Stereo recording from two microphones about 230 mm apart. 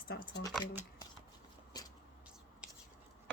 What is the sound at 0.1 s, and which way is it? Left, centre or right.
Speech, left.